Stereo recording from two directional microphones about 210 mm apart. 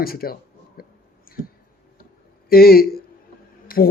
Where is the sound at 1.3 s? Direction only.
45° left (ahead or behind).